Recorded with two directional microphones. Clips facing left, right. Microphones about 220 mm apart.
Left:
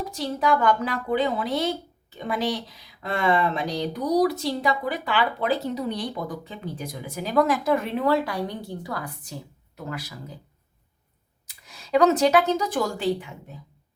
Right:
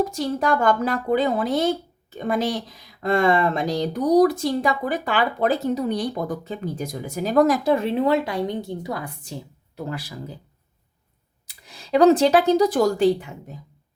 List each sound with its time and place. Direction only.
0.0 s speech: 45° right (ahead or behind); by 10.2 s 30° right (ahead or behind)
11.4 s speech: 30° right (ahead or behind)